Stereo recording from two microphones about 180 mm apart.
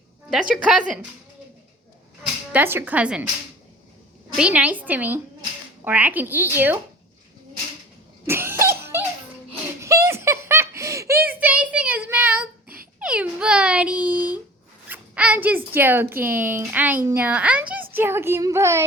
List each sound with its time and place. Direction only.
0.5 s speech: 5° right (ahead or behind)
2.2 s speech: 10° right (ahead or behind)
4.4 s speech: 5° right (ahead or behind)
8.3 s cough: 15° right (ahead or behind)
8.8 s music: 15° right (ahead or behind)
9.8 s giggle: 15° right (ahead or behind)
12.6 s a sound: 55° right (ahead or behind)
13.0 s dog: 5° right (ahead or behind)
14.8 s speech: 10° right (ahead or behind)